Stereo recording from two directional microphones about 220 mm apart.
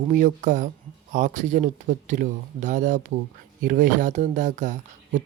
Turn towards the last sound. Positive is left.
turn(degrees=-35)  # may be behind; listen again after turning